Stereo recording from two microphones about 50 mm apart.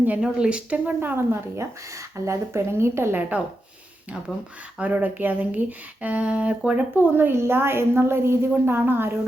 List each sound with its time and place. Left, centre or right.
0.2 s speech: centre
0.9 s a woman's voice: right
1.3 s speech: right
3.2 s speech: right
4.8 s speech: right
6.7 s a woman's voice: right
8.7 s a woman's voice: right